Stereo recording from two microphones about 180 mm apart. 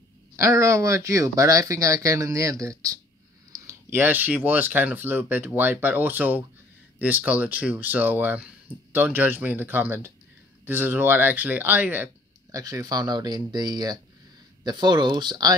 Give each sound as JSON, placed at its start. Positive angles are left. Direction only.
{"t": 0.4, "sound": "speech", "side_deg": -15}